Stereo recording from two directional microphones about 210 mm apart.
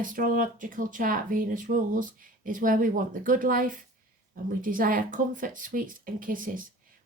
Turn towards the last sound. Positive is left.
turn(degrees=-40)  # may be behind; listen again after turning